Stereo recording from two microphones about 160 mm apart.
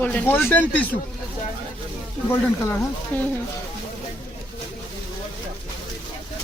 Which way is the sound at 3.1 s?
10° left (ahead or behind).